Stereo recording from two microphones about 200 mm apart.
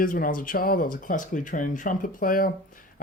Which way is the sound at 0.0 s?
45° left (ahead or behind).